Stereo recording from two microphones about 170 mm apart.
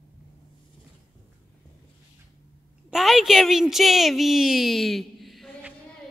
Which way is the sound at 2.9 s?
Centre (ahead or behind).